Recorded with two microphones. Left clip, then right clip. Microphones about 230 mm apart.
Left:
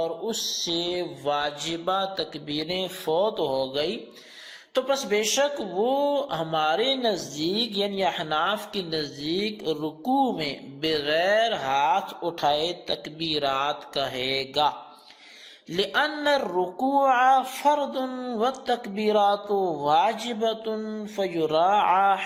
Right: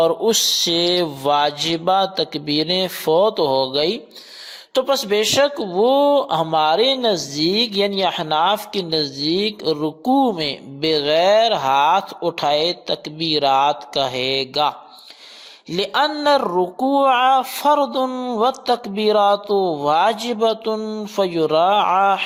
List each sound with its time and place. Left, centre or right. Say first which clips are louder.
0.0 s mantra: right 12 dB; right
4.7 s speech: right 6 dB; right